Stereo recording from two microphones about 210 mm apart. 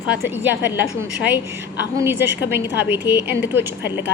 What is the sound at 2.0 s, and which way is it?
Speech, 10° right (ahead or behind).